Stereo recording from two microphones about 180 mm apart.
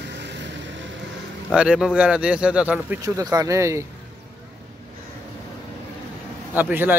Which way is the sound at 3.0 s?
20° right (ahead or behind).